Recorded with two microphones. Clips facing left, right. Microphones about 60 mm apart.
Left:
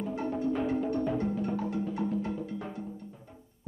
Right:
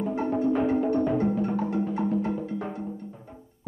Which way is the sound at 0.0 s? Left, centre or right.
Right.